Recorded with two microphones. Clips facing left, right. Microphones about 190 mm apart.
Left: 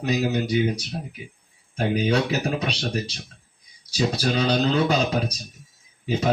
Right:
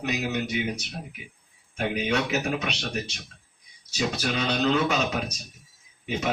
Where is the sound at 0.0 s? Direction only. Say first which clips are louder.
Left 5 dB; 35° left (ahead or behind).